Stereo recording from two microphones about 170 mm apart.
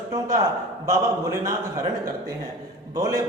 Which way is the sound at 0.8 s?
15° right (ahead or behind).